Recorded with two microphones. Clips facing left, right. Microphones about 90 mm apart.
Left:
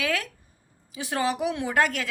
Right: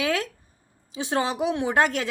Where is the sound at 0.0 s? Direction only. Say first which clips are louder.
Right 3 dB; 25° right (ahead or behind).